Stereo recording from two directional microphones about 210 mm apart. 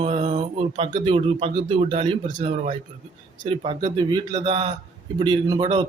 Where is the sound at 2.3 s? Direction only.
35° right (ahead or behind).